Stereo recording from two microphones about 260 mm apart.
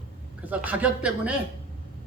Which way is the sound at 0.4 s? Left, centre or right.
Centre.